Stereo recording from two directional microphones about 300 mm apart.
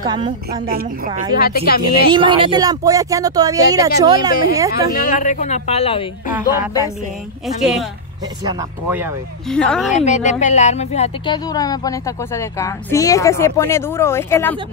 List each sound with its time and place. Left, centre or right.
0.0 s speech: centre
0.7 s a woman's voice: right
1.3 s speech: left
1.8 s speech: centre
4.7 s speech: left; by 6.9 s centre
7.6 s speech: centre
10.0 s speech: left; by 14.6 s centre